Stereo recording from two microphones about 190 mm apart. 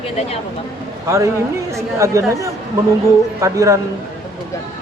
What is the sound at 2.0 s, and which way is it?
Speech, 15° right (ahead or behind).